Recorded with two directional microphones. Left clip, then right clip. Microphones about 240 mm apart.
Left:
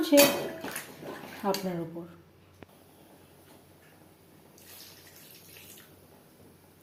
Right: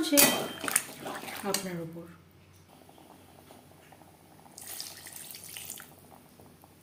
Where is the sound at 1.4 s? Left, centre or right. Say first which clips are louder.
Left 4 dB; centre.